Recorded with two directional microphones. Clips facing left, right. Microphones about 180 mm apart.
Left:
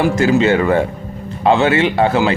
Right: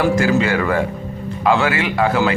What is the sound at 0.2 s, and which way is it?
Speech, 25° left (ahead or behind).